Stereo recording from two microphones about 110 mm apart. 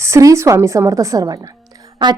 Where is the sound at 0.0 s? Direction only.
30° right (ahead or behind).